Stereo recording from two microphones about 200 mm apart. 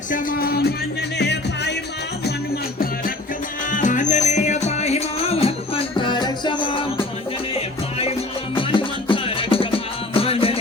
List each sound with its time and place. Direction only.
0.1 s music: 45° left (ahead or behind)
3.7 s music: 40° left (ahead or behind)